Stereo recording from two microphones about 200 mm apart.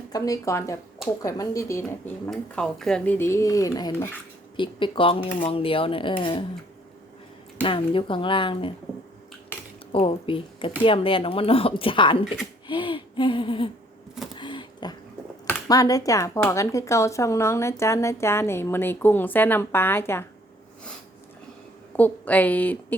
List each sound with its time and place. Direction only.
0.1 s speech: 15° left (ahead or behind)
7.6 s speech: 25° left (ahead or behind)
9.9 s speech: 25° left (ahead or behind)
12.6 s a sound: 25° left (ahead or behind)
15.4 s speech: 15° left (ahead or behind)
21.9 s speech: 10° left (ahead or behind)